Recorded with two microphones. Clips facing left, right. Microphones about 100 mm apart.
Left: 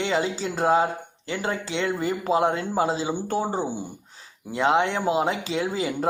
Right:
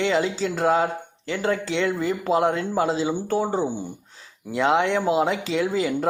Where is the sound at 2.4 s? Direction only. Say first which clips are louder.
Right 1 dB; 30° left (ahead or behind).